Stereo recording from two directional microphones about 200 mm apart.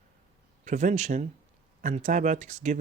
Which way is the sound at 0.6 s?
40° right (ahead or behind).